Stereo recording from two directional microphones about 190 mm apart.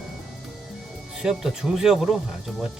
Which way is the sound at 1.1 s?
5° right (ahead or behind).